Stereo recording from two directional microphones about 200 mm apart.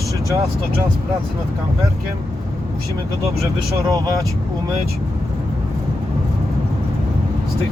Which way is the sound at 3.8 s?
15° right (ahead or behind).